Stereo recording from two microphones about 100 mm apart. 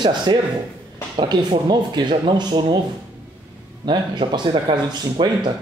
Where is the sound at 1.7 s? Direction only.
50° right (ahead or behind).